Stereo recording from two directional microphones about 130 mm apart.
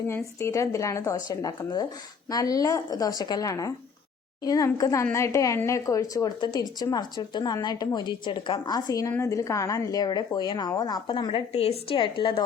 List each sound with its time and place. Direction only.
0.1 s a woman's voice: 20° left (ahead or behind); by 12.5 s 40° left (ahead or behind)